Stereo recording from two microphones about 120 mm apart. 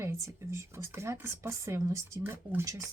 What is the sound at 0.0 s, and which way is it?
Speech, 20° right (ahead or behind).